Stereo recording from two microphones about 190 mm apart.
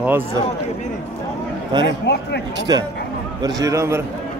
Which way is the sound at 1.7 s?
20° right (ahead or behind).